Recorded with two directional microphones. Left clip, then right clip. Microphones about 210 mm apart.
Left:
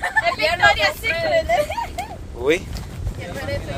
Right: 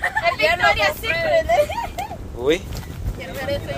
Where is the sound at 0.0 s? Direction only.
20° right (ahead or behind).